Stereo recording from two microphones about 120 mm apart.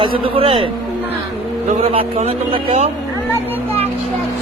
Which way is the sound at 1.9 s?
50° right (ahead or behind).